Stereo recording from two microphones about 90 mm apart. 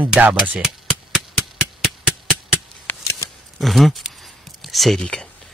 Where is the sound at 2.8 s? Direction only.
30° left (ahead or behind).